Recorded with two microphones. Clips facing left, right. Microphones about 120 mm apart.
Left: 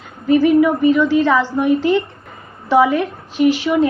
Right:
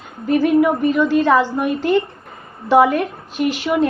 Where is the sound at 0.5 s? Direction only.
55° right (ahead or behind).